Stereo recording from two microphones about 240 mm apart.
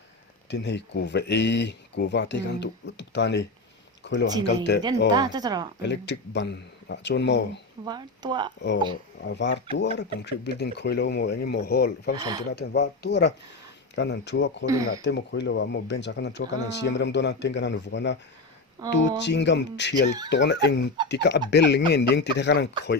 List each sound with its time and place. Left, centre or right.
0.5 s speech: left
5.1 s speech: centre
5.8 s speech: left
7.9 s speech: centre
9.2 s speech: left
12.1 s speech: centre
12.5 s speech: left
14.7 s speech: centre
15.0 s speech: left